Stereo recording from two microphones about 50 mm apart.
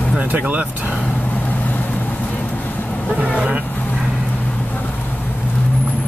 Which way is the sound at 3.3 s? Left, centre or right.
Right.